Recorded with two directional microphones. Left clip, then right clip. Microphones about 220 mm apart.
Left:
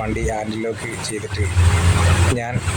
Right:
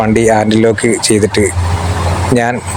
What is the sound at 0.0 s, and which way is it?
Speech, 35° right (ahead or behind).